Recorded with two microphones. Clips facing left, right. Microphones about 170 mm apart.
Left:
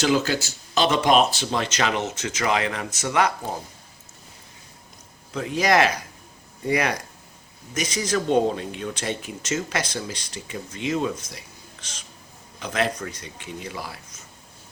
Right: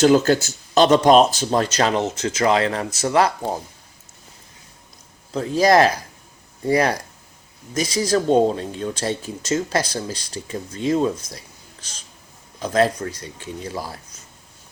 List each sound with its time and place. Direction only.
0.0 s speech: 45° right (ahead or behind)
5.3 s speech: 35° right (ahead or behind)
12.5 s speech: 35° right (ahead or behind)